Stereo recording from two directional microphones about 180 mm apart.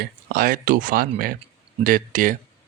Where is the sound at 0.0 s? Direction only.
55° right (ahead or behind).